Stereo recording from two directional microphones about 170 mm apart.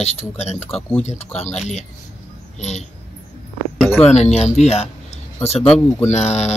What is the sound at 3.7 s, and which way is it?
Speech, 10° left (ahead or behind).